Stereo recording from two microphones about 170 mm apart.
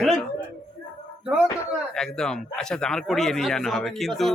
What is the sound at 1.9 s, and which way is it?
A man's voice, 5° left (ahead or behind).